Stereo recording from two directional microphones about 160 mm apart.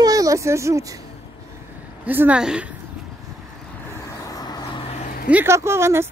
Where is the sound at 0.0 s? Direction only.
20° right (ahead or behind).